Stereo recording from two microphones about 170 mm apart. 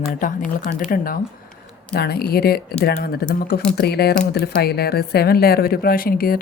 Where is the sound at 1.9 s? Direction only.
65° left (ahead or behind).